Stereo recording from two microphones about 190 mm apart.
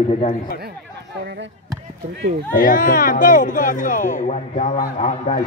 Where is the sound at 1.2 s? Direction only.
65° right (ahead or behind).